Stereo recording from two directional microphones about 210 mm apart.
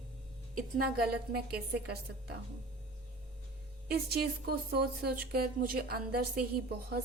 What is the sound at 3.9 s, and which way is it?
A woman's voice, 50° right (ahead or behind).